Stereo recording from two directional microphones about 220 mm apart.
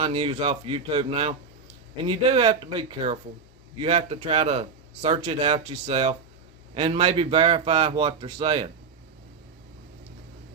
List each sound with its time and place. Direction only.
0.0 s a man's voice: 25° right (ahead or behind)